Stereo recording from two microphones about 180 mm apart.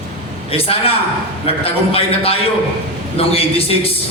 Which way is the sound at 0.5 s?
30° left (ahead or behind).